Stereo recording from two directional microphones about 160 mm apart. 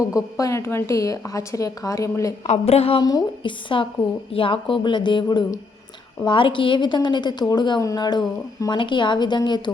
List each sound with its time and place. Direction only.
0.2 s a woman's voice: 20° left (ahead or behind)
2.5 s speech: 40° left (ahead or behind)
3.0 s a woman's voice: 25° left (ahead or behind)